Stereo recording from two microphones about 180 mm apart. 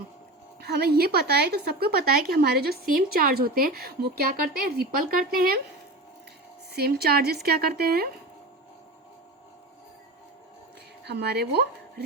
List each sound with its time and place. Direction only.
0.6 s a woman's voice: 60° right (ahead or behind)
6.7 s a woman's voice: 60° right (ahead or behind)
11.0 s speech: 65° right (ahead or behind)